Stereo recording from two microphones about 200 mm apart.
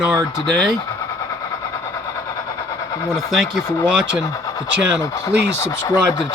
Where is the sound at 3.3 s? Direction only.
Centre (ahead or behind).